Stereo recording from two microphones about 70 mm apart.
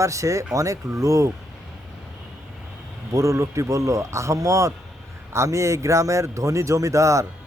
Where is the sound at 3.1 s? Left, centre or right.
Right.